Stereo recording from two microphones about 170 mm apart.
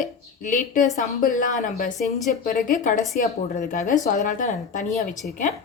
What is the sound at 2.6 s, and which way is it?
A woman's voice, 50° left (ahead or behind).